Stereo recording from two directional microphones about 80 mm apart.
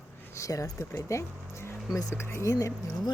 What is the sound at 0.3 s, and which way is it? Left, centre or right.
Speech, left.